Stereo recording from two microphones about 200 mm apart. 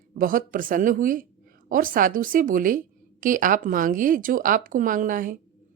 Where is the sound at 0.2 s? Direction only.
45° right (ahead or behind).